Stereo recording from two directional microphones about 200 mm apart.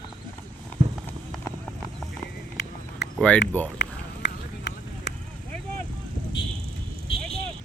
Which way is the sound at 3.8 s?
60° left (ahead or behind).